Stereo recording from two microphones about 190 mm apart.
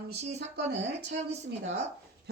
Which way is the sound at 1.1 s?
65° right (ahead or behind).